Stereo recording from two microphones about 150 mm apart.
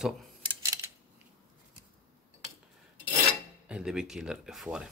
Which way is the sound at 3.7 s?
5° right (ahead or behind).